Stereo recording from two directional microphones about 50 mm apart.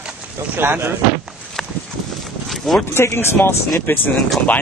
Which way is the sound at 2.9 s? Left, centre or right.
Left.